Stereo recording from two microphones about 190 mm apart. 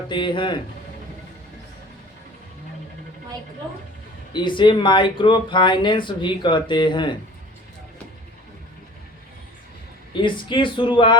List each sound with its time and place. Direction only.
0.1 s speech: 25° left (ahead or behind)
4.4 s speech: 25° left (ahead or behind)
10.2 s speech: 25° left (ahead or behind)